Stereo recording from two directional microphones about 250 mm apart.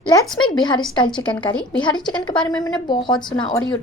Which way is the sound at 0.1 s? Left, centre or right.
Centre.